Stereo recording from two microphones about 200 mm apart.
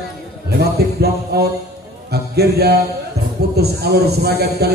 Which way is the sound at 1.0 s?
50° right (ahead or behind).